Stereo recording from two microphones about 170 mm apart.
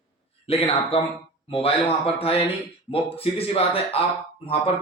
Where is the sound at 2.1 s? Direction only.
35° left (ahead or behind).